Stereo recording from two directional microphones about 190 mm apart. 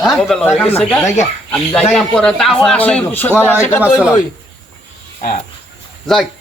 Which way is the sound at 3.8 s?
5° right (ahead or behind).